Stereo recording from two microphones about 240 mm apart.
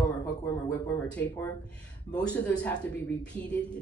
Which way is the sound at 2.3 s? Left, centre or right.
Centre.